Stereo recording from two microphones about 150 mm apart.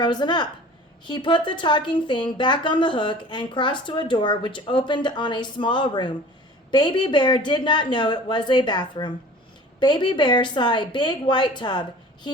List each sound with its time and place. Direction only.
0.0 s a woman's voice: 30° left (ahead or behind)